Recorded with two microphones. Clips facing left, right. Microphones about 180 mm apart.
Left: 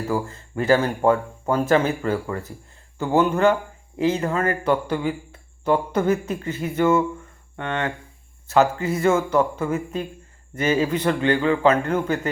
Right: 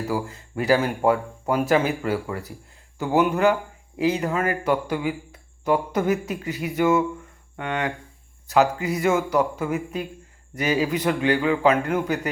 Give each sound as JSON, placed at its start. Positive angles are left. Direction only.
{"t": 0.1, "sound": "speech", "side_deg": -10}
{"t": 10.8, "sound": "speech", "side_deg": -5}